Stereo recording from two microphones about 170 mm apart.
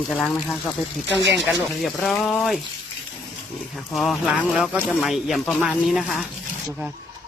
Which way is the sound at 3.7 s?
Centre (ahead or behind).